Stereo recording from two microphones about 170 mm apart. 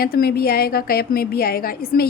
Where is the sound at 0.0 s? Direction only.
65° left (ahead or behind).